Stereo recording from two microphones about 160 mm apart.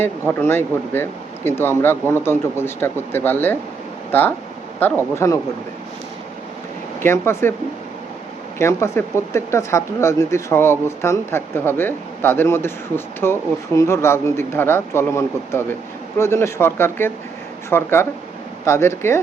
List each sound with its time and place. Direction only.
0.0 s speech: 15° left (ahead or behind)
7.0 s speech: 15° left (ahead or behind)
8.5 s speech: 15° left (ahead or behind)